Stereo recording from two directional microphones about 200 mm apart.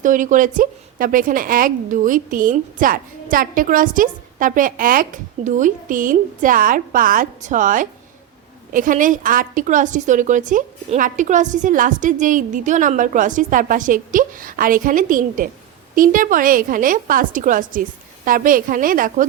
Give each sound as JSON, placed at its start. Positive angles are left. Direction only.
{"t": 0.0, "sound": "a woman's voice", "side_deg": -40}